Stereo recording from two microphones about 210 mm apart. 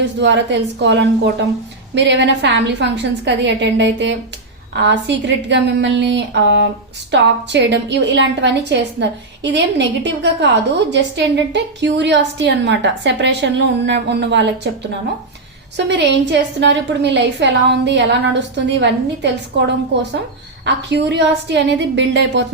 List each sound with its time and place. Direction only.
0.0 s a woman's voice: 55° right (ahead or behind)
15.9 s a woman's voice: 60° right (ahead or behind)